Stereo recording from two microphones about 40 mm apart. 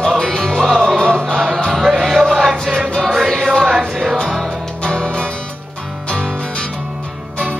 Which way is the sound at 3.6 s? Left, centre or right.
Centre.